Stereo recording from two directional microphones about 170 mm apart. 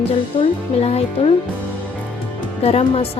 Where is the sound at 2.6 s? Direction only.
35° left (ahead or behind).